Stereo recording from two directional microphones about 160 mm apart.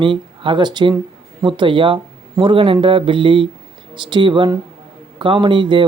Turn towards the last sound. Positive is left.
turn(degrees=-30)  # may be behind; listen again after turning